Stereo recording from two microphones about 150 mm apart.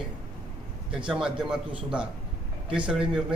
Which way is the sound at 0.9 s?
5° right (ahead or behind).